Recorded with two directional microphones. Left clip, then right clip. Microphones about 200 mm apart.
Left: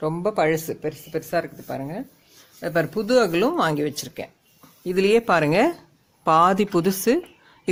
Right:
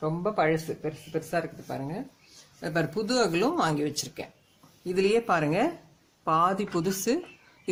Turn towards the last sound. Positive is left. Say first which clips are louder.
# left 7 dB
turn(degrees=40)  # may be behind; listen again after turning